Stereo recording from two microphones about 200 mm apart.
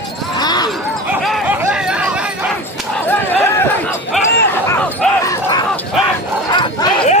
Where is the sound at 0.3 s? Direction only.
20° left (ahead or behind).